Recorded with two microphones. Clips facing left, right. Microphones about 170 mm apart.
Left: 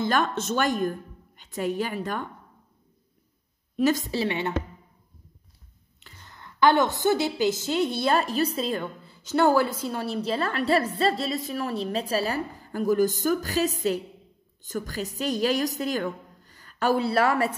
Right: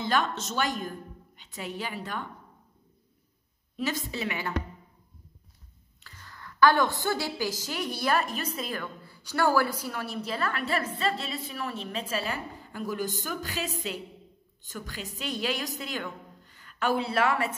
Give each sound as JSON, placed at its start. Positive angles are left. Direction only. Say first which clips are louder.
{"t": 0.0, "sound": "a woman's voice", "louder": "left 3 dB", "side_deg": 50}
{"t": 3.7, "sound": "a woman's voice", "louder": "left 9 dB", "side_deg": 45}
{"t": 5.9, "sound": "a woman's voice", "louder": "even", "side_deg": 20}